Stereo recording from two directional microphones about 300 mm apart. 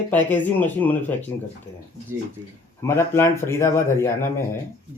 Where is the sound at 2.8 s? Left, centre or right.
Centre.